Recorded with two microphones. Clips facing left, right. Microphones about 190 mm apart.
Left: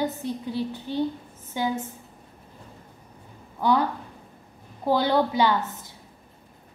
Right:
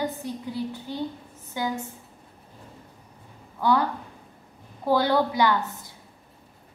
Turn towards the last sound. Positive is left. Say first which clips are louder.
# even
turn(degrees=20)  # may be behind; listen again after turning